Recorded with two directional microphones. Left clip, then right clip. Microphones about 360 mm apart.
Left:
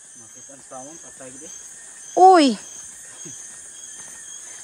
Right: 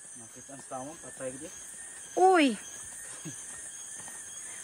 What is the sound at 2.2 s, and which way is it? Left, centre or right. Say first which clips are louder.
Speech: left 11 dB; centre.